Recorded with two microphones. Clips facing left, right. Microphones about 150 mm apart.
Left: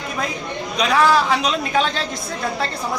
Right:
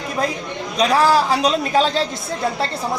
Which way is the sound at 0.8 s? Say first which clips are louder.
Right 1 dB; 35° right (ahead or behind).